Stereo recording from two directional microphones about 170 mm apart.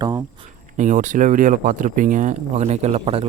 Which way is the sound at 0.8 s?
45° right (ahead or behind).